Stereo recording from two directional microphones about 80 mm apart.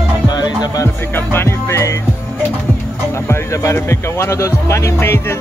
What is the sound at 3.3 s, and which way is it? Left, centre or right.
Speech, left.